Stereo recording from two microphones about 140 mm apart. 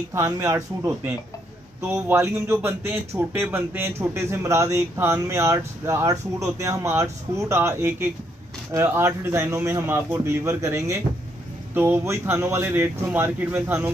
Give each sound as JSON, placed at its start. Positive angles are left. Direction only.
{"t": 0.1, "sound": "speech", "side_deg": -20}